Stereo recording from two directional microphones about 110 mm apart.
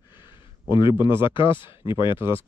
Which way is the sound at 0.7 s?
50° left (ahead or behind).